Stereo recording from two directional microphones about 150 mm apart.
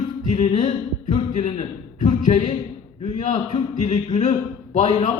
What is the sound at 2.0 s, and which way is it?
A man's voice, 55° left (ahead or behind).